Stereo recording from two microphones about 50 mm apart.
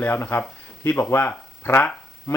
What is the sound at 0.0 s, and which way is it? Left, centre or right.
A man's voice, left.